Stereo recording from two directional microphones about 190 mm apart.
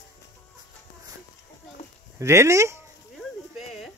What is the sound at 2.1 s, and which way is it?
Speech, 15° right (ahead or behind).